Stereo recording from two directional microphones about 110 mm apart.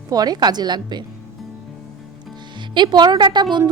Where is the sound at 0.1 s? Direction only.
40° right (ahead or behind).